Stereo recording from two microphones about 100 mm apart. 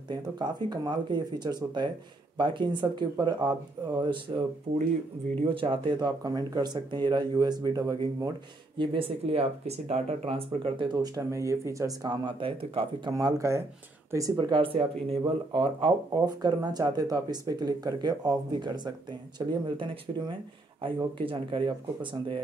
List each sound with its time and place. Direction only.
0.1 s speech: 45° right (ahead or behind)
5.9 s speech: 40° right (ahead or behind)
8.7 s speech: 60° right (ahead or behind)
11.1 s speech: 30° right (ahead or behind)
12.4 s speech: 65° right (ahead or behind)
13.1 s speech: 30° right (ahead or behind)
14.5 s speech: 65° right (ahead or behind)
16.1 s speech: 40° right (ahead or behind)
20.1 s speech: 60° right (ahead or behind)